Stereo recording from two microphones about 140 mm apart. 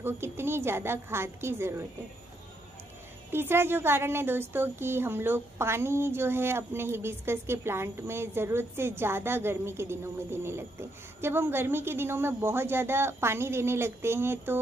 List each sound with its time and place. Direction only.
0.0 s a woman's voice: 15° right (ahead or behind)
3.3 s a woman's voice: 15° right (ahead or behind)